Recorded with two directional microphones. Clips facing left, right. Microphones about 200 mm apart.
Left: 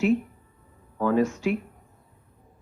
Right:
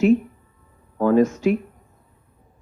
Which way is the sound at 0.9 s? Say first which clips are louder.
Right 6 dB; 40° right (ahead or behind).